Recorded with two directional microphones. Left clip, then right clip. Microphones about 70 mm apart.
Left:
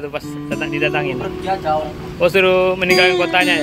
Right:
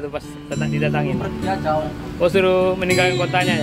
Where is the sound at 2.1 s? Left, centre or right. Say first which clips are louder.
Left 3 dB; centre.